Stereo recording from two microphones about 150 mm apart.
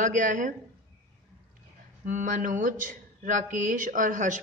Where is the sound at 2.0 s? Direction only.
60° right (ahead or behind).